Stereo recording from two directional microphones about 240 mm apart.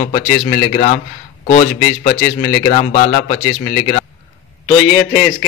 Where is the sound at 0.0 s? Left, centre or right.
Left.